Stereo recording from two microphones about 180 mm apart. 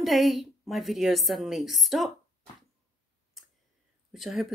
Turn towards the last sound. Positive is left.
turn(degrees=0)  # may be behind; listen again after turning